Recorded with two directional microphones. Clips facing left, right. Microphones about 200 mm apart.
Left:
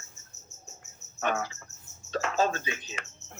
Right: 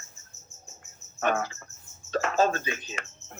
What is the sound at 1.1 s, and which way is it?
Cricket, 50° right (ahead or behind).